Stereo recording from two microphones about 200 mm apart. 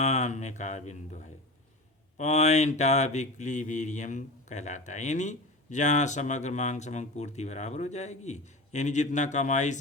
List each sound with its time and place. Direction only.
0.0 s mantra: 35° left (ahead or behind)